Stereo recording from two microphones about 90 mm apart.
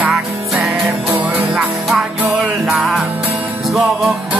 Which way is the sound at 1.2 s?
15° right (ahead or behind).